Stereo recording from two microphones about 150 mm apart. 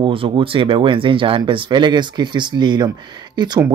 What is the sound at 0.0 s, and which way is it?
Speech, 35° right (ahead or behind).